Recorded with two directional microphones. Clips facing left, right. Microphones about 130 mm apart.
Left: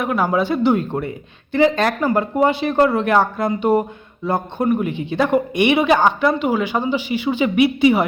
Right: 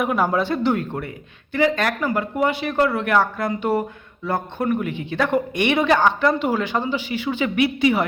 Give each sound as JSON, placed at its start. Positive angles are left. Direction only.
{"t": 0.0, "sound": "speech", "side_deg": 0}
{"t": 0.7, "sound": "speech", "side_deg": 25}